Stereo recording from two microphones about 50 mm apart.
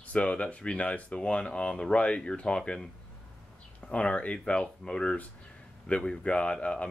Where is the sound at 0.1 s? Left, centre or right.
Left.